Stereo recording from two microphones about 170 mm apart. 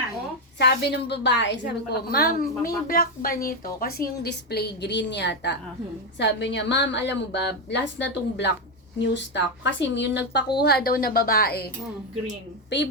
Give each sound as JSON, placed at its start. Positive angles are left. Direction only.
{"t": 0.6, "sound": "a woman's voice", "side_deg": 80}
{"t": 10.6, "sound": "speech", "side_deg": 70}